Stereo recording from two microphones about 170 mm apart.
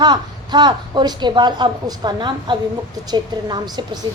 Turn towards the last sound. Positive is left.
turn(degrees=-25)  # may be behind; listen again after turning